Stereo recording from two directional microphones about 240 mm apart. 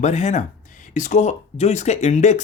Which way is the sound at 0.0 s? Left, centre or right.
Left.